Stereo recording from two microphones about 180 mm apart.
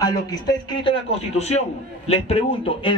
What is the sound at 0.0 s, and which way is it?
Speech, 20° left (ahead or behind).